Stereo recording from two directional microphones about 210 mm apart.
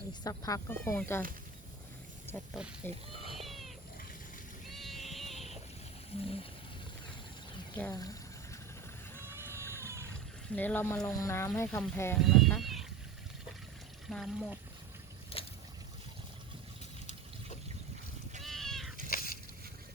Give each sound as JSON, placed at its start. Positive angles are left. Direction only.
{"t": 0.1, "sound": "speech", "side_deg": 15}
{"t": 2.2, "sound": "speech", "side_deg": 10}
{"t": 3.3, "sound": "cat", "side_deg": 0}
{"t": 4.7, "sound": "cat", "side_deg": 0}
{"t": 7.8, "sound": "speech", "side_deg": 15}
{"t": 9.3, "sound": "vehicle", "side_deg": -10}
{"t": 10.5, "sound": "speech", "side_deg": 10}
{"t": 12.2, "sound": "a sound", "side_deg": 0}
{"t": 14.1, "sound": "speech", "side_deg": 0}
{"t": 15.4, "sound": "boat", "side_deg": 25}
{"t": 18.4, "sound": "cat", "side_deg": 0}
{"t": 19.0, "sound": "a sound", "side_deg": 45}